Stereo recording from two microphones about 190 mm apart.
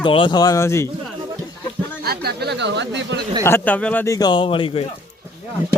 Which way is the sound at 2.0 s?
55° right (ahead or behind).